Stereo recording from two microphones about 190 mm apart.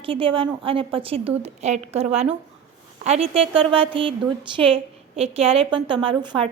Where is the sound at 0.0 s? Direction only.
30° right (ahead or behind).